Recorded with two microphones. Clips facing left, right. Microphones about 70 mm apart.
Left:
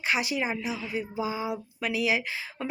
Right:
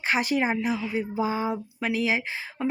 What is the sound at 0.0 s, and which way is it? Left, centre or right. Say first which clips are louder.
Speech: right 4 dB; right.